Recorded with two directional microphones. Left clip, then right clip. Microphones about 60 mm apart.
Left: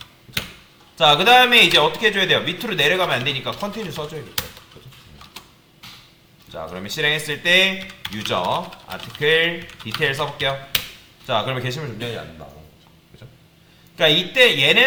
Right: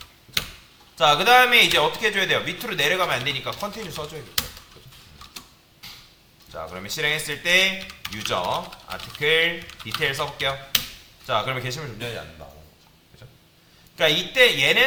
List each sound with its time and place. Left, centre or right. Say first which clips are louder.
0.9 s speech: left 3 dB; right
6.5 s speech: left 2 dB; right
7.8 s speech: left 3 dB; centre
8.3 s speech: left 3 dB; right
8.5 s speech: left 3 dB; centre
9.2 s speech: left 3 dB; right
11.3 s speech: left 2 dB; right
13.9 s speech: left 4 dB; right